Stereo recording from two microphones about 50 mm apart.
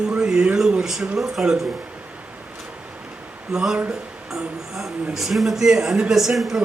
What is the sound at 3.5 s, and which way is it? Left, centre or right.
Speech, centre.